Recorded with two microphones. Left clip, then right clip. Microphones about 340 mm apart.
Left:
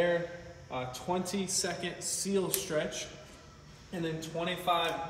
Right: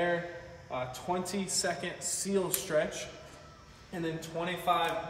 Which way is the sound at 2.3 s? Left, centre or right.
Centre.